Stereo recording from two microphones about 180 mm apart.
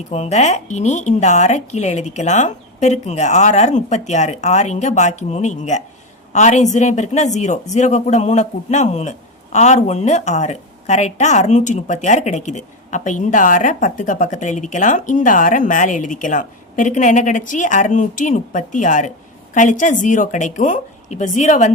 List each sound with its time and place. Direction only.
0.1 s a woman's voice: 40° left (ahead or behind)